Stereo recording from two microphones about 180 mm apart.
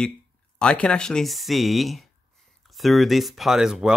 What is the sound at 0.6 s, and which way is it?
Speech, 5° left (ahead or behind).